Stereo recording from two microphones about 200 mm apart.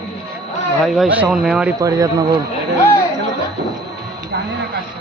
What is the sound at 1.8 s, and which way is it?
Speech, 15° right (ahead or behind).